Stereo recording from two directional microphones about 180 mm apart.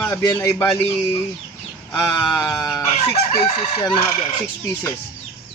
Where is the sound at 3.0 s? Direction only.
35° left (ahead or behind).